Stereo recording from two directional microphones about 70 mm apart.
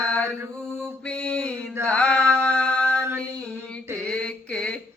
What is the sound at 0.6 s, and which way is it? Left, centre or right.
Mantra, centre.